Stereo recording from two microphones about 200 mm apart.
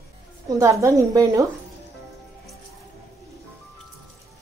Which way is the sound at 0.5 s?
15° right (ahead or behind).